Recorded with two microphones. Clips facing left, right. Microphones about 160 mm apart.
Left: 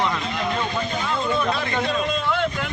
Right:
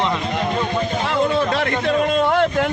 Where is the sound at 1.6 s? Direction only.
60° right (ahead or behind).